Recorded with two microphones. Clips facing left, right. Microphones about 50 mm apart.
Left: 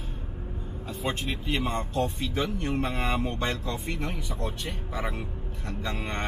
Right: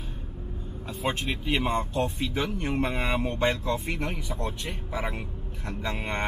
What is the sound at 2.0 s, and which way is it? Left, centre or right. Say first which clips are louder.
Speech: even; centre.